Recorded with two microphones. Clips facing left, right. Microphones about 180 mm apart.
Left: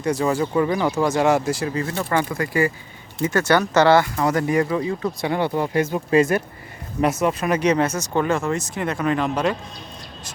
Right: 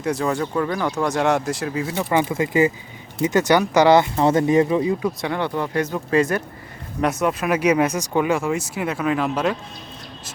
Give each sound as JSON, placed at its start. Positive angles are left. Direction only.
{"t": 0.0, "sound": "speech", "side_deg": 0}
{"t": 1.9, "sound": "speech", "side_deg": -15}
{"t": 5.0, "sound": "speech", "side_deg": 5}